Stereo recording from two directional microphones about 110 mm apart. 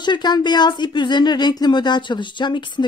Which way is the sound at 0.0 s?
40° left (ahead or behind).